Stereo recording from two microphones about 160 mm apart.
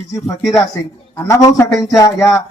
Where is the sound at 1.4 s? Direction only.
15° left (ahead or behind).